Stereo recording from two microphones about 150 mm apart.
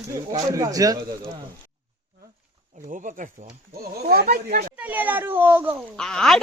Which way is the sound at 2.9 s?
60° right (ahead or behind).